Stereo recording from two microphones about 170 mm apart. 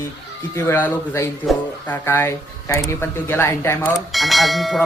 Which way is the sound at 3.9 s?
Centre (ahead or behind).